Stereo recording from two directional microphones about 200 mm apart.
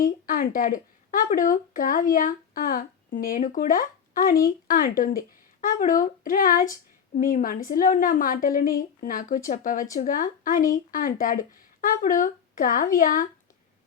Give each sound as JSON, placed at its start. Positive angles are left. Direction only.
{"t": 0.0, "sound": "a woman's voice", "side_deg": 45}